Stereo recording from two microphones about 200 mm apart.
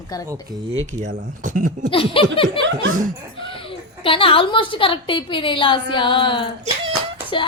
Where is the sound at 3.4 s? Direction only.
25° left (ahead or behind).